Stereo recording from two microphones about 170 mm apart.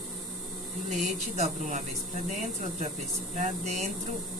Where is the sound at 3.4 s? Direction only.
40° right (ahead or behind).